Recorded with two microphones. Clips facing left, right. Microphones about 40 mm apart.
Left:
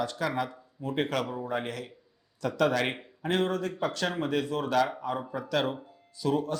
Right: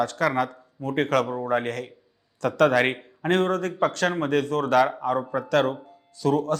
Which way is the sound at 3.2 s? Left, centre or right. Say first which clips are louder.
Right 5 dB; right.